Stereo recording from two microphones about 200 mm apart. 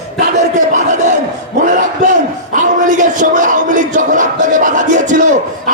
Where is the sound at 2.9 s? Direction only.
40° right (ahead or behind).